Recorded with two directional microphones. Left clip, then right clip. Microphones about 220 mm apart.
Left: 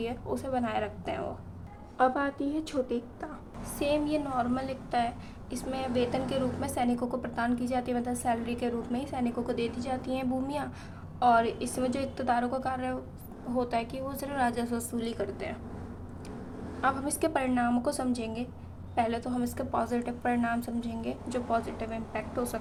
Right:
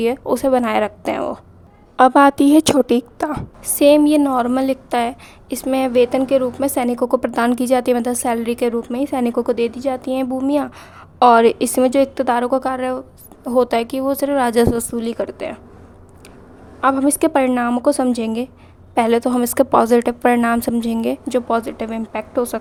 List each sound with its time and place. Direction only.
0.0 s a woman's voice: 50° right (ahead or behind)
16.8 s a woman's voice: 45° right (ahead or behind)